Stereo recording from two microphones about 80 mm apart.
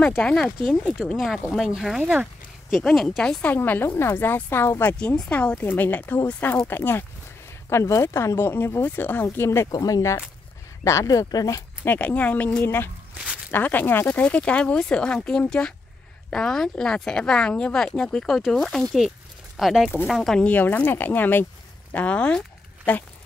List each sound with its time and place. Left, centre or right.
0.2 s a woman's voice: centre
2.0 s speech: centre
2.7 s a woman's voice: centre
3.5 s speech: left
4.9 s speech: centre; by 7.1 s left
7.7 s speech: left
9.7 s speech: left
11.9 s speech: left; by 18.9 s centre
18.9 s a sound: centre
20.1 s a woman's voice: centre
20.4 s speech: left